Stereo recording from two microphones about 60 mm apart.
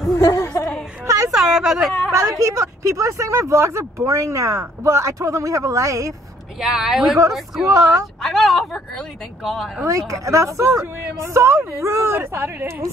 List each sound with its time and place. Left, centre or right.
0.1 s speech: left
1.0 s a sound: right
1.3 s speech: centre
2.3 s speech: right
6.6 s a woman's voice: centre
9.8 s speech: right